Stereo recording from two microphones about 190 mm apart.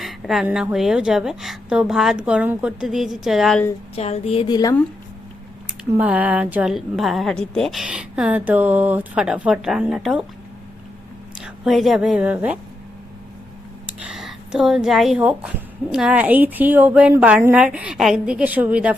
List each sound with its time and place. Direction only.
0.0 s speech: centre (ahead or behind)
3.9 s a woman's voice: 35° left (ahead or behind)
5.6 s speech: 10° right (ahead or behind)
11.3 s a woman's voice: 5° right (ahead or behind)
13.8 s speech: 5° right (ahead or behind)